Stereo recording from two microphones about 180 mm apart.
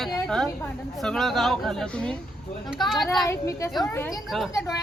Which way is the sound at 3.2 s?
15° left (ahead or behind).